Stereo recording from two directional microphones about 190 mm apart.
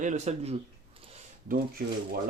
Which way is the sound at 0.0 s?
35° right (ahead or behind).